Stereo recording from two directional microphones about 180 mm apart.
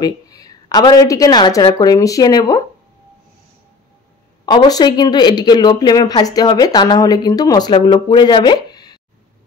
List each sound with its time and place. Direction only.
0.0 s a woman's voice: 20° left (ahead or behind)
4.5 s speech: 20° left (ahead or behind)